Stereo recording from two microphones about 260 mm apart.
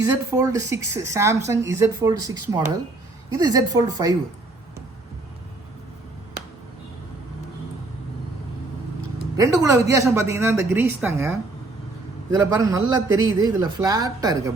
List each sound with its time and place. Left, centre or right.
0.0 s a man's voice: centre
9.4 s a man's voice: centre